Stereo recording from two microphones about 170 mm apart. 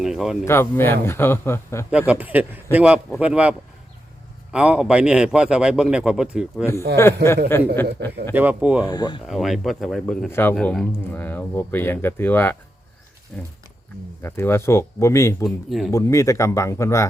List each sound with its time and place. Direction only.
0.0 s a man's voice: 5° right (ahead or behind)
0.4 s a man's voice: 15° left (ahead or behind)
1.9 s speech: 10° right (ahead or behind)
4.5 s a man's voice: 5° right (ahead or behind)
7.0 s a man's voice: 15° left (ahead or behind)
8.3 s speech: 10° right (ahead or behind)
8.8 s speech: 25° left (ahead or behind)
9.2 s a man's voice: centre (ahead or behind); by 15.4 s 15° left (ahead or behind)
15.4 s a man's voice: centre (ahead or behind)
15.9 s a man's voice: 20° left (ahead or behind)